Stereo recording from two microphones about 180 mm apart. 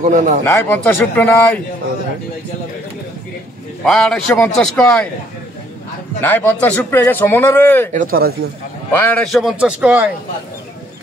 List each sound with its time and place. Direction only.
0.0 s speech: 45° right (ahead or behind)
0.4 s speech: 10° left (ahead or behind)
3.8 s a man's voice: 5° left (ahead or behind)
6.2 s speech: 10° left (ahead or behind)
7.9 s speech: 50° right (ahead or behind)
8.9 s a man's voice: 10° left (ahead or behind)